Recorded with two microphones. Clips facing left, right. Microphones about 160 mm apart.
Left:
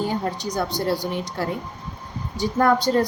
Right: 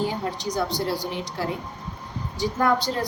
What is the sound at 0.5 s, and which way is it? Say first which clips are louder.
Speech: left 2 dB; 50° left (ahead or behind).